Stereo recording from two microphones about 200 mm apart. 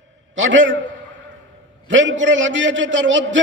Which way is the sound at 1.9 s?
70° right (ahead or behind).